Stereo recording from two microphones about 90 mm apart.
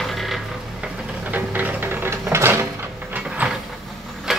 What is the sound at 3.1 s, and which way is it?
Mechanisms, 15° right (ahead or behind).